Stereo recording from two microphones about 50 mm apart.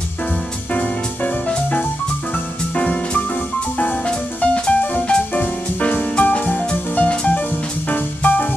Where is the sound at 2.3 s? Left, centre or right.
Left.